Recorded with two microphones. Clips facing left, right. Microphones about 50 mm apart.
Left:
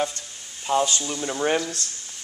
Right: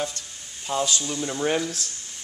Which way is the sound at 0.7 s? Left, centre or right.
Centre.